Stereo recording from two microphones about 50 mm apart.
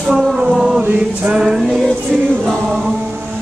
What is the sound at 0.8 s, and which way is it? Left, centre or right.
Music, right.